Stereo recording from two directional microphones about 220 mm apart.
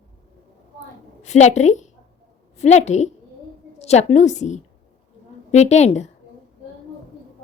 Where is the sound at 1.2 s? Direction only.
30° left (ahead or behind).